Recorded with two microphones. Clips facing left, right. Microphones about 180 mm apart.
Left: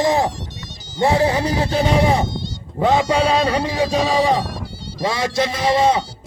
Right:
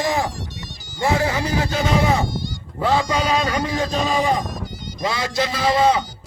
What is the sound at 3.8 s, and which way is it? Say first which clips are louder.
A man's voice: left 5 dB; 10° left (ahead or behind).